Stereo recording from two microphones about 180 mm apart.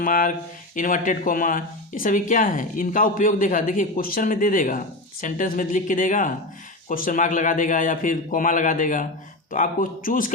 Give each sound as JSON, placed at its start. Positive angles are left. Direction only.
{"t": 0.0, "sound": "speech", "side_deg": 50}